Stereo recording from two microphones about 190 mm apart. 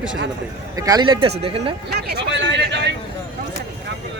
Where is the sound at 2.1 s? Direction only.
65° right (ahead or behind).